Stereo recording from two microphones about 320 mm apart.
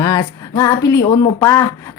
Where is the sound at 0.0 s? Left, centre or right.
Centre.